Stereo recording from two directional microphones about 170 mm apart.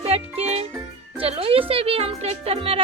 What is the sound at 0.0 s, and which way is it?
Music, 35° right (ahead or behind).